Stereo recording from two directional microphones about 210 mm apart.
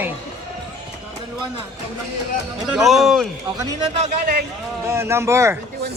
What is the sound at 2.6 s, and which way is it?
Speech, centre (ahead or behind).